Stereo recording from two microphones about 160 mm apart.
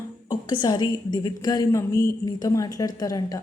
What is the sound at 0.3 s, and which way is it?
A woman's voice, 25° left (ahead or behind).